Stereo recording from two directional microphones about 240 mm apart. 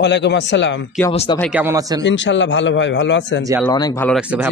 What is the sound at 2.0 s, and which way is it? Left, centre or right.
A man's voice, left.